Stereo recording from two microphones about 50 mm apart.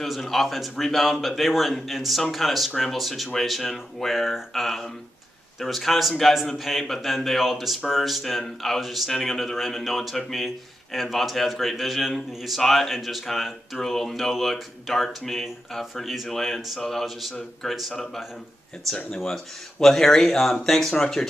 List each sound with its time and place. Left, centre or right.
0.0 s speech: centre
19.0 s speech: centre